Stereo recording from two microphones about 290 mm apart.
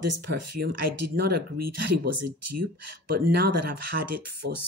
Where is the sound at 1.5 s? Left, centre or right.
Right.